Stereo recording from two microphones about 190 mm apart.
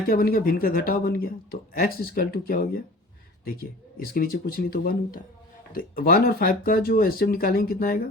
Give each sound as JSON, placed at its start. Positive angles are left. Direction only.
{"t": 0.1, "sound": "speech", "side_deg": 50}